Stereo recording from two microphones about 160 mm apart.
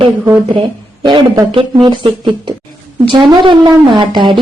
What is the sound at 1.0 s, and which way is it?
Speech, 30° right (ahead or behind).